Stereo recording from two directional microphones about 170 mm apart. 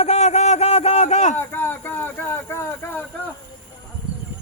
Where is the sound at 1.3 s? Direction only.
10° left (ahead or behind).